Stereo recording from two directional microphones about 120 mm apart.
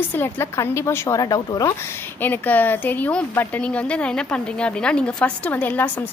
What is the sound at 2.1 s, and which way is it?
A woman's voice, 15° left (ahead or behind).